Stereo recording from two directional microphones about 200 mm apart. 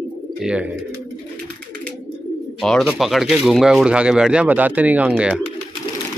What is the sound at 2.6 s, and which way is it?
Speech, centre (ahead or behind).